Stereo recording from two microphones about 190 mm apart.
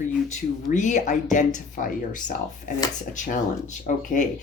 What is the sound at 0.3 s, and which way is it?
Speech, 40° left (ahead or behind).